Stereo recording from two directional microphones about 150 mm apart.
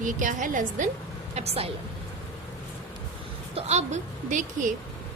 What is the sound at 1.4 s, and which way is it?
Speech, 40° right (ahead or behind).